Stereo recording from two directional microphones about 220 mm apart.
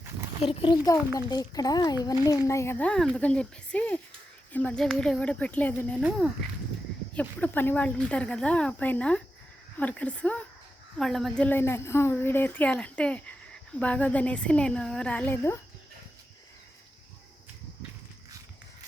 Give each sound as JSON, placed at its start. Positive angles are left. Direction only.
{"t": 0.4, "sound": "a child's voice", "side_deg": 20}
{"t": 6.0, "sound": "a woman's voice", "side_deg": -5}